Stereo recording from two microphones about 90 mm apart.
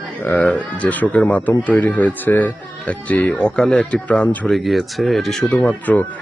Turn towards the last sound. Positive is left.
turn(degrees=15)  # may be behind; listen again after turning